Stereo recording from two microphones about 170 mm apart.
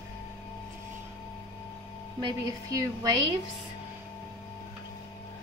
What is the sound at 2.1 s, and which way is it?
A woman's voice, 20° right (ahead or behind).